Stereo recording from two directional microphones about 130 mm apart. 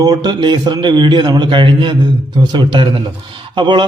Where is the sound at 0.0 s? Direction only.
30° right (ahead or behind).